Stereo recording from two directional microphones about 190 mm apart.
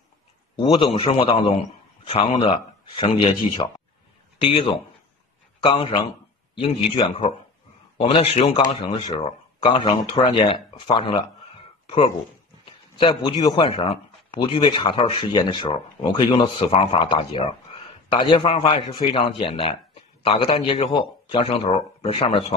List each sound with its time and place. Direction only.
0.6 s a man's voice: 25° left (ahead or behind)